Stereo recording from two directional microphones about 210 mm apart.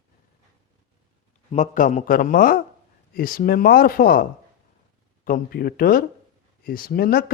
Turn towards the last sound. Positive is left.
turn(degrees=45)  # may be behind; listen again after turning